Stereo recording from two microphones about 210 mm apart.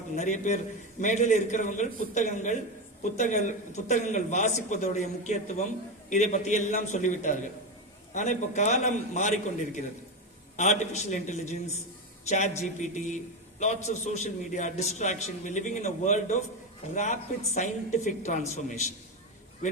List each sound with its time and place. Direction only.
0.2 s a man's voice: 35° left (ahead or behind)
10.6 s a man's voice: 35° left (ahead or behind)